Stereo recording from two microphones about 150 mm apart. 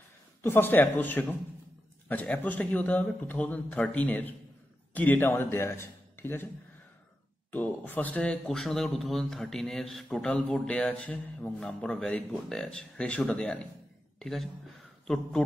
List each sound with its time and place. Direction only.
0.4 s a man's voice: 15° left (ahead or behind)
7.5 s a man's voice: 10° left (ahead or behind)